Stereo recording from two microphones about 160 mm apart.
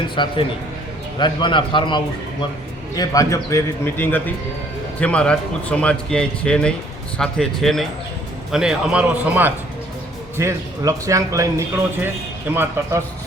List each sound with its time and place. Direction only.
0.2 s a man's voice: 30° left (ahead or behind); by 13.0 s 15° right (ahead or behind)